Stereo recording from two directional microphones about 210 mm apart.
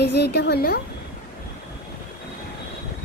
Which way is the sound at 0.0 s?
50° left (ahead or behind).